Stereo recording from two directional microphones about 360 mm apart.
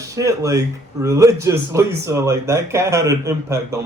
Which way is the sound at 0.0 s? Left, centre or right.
Centre.